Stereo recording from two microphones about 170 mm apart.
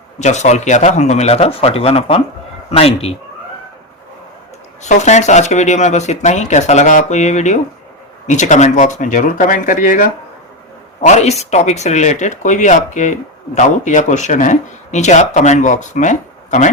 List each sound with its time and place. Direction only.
0.2 s speech: 45° left (ahead or behind)
4.8 s speech: 45° left (ahead or behind)